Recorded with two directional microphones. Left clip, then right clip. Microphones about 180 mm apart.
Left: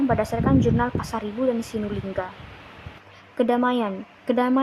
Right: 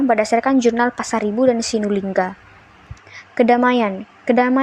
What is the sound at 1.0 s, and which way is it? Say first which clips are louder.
Speech: right 9 dB; 15° right (ahead or behind).